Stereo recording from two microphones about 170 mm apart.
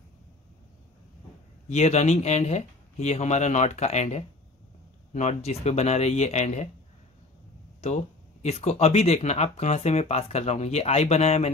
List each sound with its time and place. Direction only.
1.7 s speech: 40° left (ahead or behind)
7.8 s speech: 40° left (ahead or behind)